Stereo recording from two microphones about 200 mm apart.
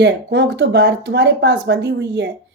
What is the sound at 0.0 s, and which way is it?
Speech, 65° right (ahead or behind).